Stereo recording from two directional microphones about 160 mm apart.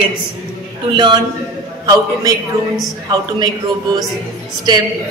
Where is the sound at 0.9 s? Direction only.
30° right (ahead or behind).